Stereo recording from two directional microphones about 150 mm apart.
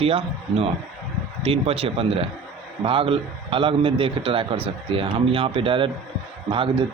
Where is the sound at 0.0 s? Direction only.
40° right (ahead or behind).